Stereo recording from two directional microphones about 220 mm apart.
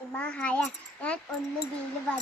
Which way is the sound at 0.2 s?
5° left (ahead or behind).